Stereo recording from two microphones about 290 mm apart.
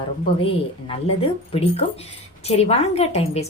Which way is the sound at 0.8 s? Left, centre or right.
Centre.